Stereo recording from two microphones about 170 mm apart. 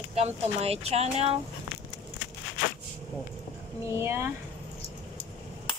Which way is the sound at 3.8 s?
15° right (ahead or behind).